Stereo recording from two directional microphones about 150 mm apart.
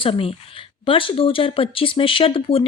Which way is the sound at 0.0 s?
40° left (ahead or behind).